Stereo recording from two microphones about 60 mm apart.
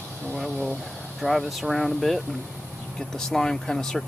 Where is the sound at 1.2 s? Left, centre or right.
Centre.